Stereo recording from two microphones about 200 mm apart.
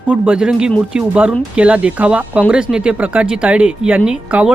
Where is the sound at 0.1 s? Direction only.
5° right (ahead or behind).